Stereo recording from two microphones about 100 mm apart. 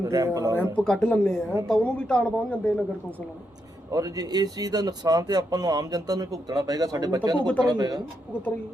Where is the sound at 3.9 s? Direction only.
40° right (ahead or behind).